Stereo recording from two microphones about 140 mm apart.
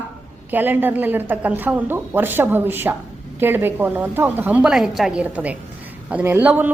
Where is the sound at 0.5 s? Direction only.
15° right (ahead or behind).